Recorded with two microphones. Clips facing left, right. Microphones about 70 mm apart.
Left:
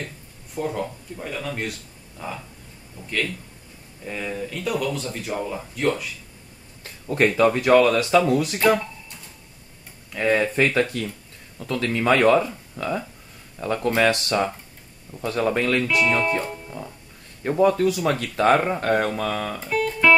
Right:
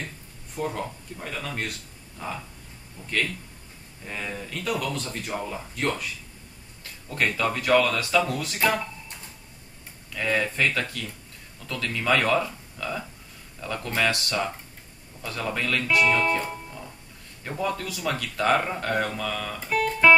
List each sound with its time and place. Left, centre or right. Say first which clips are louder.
0.6 s speech: left 3 dB; centre
3.0 s speech: left 2 dB; centre
4.0 s speech: left 5 dB; centre
6.8 s a sound: left 6 dB; left
7.3 s speech: left 6 dB; left
10.1 s speech: left 5 dB; left
16.0 s speech: left 1 dB; centre
17.4 s speech: left 11 dB; left
19.7 s music: even; centre